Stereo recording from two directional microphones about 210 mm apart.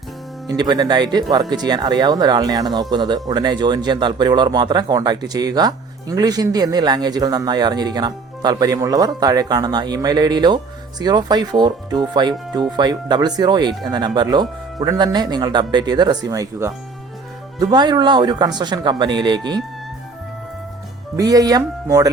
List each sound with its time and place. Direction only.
0.4 s speech: 20° right (ahead or behind)
21.2 s speech: 20° right (ahead or behind)